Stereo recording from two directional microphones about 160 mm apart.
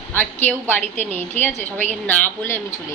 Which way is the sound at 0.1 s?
15° left (ahead or behind).